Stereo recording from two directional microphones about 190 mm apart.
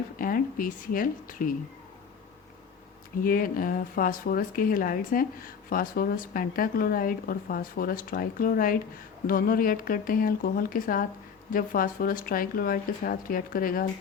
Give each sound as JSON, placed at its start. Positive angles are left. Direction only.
{"t": 0.2, "sound": "speech", "side_deg": 45}
{"t": 3.2, "sound": "speech", "side_deg": 50}